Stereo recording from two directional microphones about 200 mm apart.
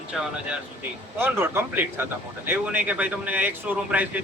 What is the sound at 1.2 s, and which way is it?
A man's voice, 10° right (ahead or behind).